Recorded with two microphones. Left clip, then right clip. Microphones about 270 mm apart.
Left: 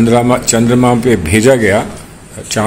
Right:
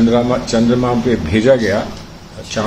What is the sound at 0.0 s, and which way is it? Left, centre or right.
Speech, left.